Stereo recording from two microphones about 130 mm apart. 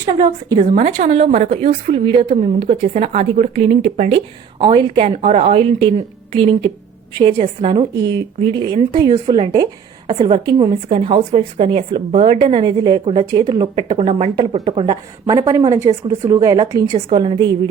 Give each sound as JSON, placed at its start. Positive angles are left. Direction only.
{"t": 0.0, "sound": "a woman's voice", "side_deg": -35}
{"t": 0.5, "sound": "a woman's voice", "side_deg": -45}
{"t": 0.8, "sound": "a woman's voice", "side_deg": -65}
{"t": 1.5, "sound": "a woman's voice", "side_deg": -45}
{"t": 4.6, "sound": "a woman's voice", "side_deg": -40}
{"t": 13.7, "sound": "a woman's voice", "side_deg": -50}
{"t": 15.4, "sound": "a woman's voice", "side_deg": -25}